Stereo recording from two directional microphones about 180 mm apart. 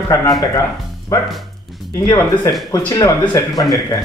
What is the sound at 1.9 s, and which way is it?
Speech, 20° left (ahead or behind).